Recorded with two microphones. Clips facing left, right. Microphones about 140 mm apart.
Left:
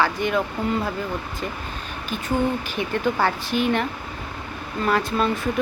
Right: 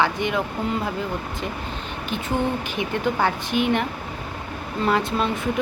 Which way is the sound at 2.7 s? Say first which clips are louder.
Even; 15° right (ahead or behind).